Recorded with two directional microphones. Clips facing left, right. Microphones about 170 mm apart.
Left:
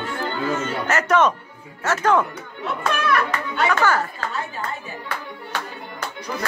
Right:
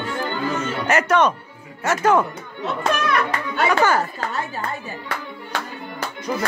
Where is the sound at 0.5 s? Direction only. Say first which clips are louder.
Right 5 dB; 15° right (ahead or behind).